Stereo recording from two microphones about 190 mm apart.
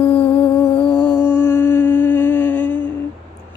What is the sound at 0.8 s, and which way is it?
Music, 25° left (ahead or behind).